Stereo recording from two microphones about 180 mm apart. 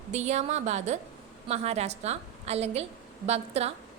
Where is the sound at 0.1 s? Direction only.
40° right (ahead or behind).